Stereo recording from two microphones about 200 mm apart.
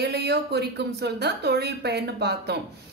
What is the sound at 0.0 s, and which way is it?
A woman's voice, 55° right (ahead or behind).